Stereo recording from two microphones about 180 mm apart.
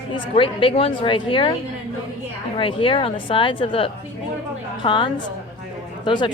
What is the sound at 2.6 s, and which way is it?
Speech, 30° left (ahead or behind).